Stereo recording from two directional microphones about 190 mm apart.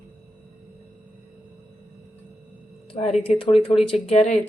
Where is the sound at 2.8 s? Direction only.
30° left (ahead or behind).